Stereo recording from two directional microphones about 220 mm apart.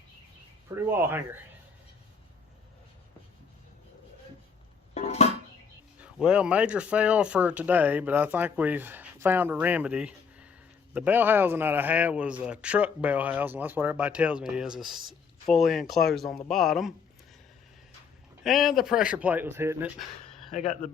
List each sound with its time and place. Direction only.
0.8 s speech: 10° right (ahead or behind)
4.9 s a sound: 30° left (ahead or behind)
6.0 s speech: 5° right (ahead or behind)
18.4 s speech: centre (ahead or behind)
20.0 s a sound: centre (ahead or behind)
20.6 s speech: 30° left (ahead or behind)